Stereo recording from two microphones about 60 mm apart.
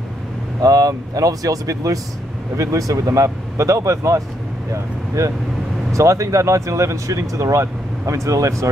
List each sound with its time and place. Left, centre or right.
0.6 s speech: right